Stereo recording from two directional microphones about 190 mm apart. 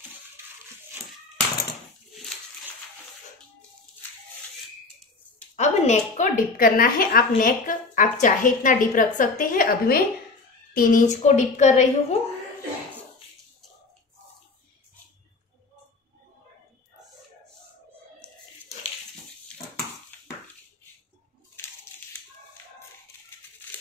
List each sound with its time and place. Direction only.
5.6 s a woman's voice: 40° left (ahead or behind)